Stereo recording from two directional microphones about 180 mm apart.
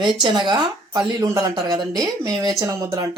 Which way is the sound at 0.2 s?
25° right (ahead or behind).